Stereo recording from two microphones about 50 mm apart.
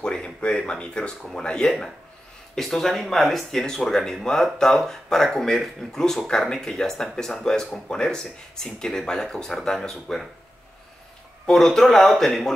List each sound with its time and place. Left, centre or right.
0.0 s a sound: centre
0.7 s speech: centre
11.4 s speech: centre